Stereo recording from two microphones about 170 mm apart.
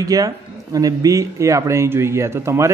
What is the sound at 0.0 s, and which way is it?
Speech, 20° right (ahead or behind).